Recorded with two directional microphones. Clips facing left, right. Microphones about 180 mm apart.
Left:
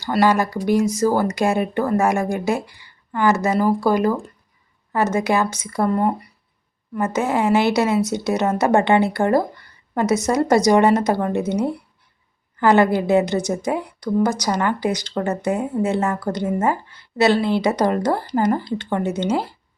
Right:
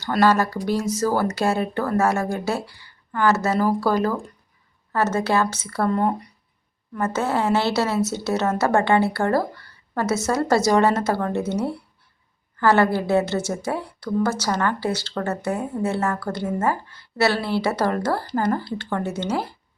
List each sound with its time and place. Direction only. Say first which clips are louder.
0.0 s a woman's voice: left 1 dB; 10° left (ahead or behind)